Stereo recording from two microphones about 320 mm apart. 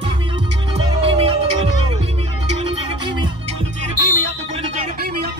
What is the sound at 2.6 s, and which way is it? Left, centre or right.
Music, centre.